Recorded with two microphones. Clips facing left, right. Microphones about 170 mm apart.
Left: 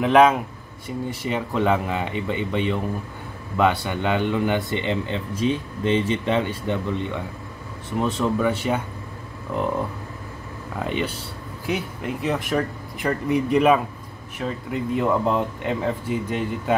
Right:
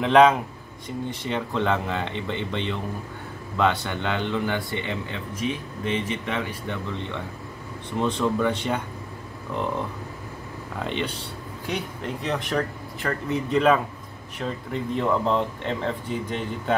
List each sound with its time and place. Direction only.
0.0 s speech: 5° left (ahead or behind); by 6.8 s 25° left (ahead or behind)
6.9 s speech: 15° left (ahead or behind)
10.8 s speech: 5° left (ahead or behind)